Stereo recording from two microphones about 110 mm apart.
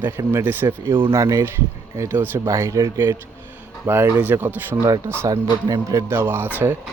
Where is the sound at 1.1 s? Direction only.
30° right (ahead or behind).